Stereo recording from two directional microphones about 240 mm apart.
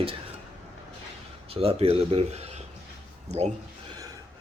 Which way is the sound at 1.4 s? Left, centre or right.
Right.